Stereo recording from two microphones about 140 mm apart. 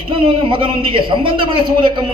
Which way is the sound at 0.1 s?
35° right (ahead or behind).